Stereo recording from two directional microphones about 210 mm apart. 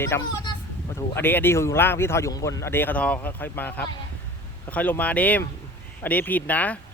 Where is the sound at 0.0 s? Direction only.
15° left (ahead or behind).